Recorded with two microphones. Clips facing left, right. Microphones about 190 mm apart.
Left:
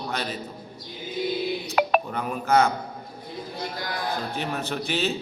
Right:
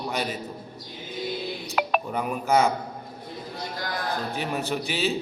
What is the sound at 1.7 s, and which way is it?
Music, centre (ahead or behind).